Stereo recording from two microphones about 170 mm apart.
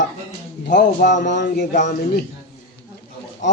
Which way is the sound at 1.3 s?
90° left.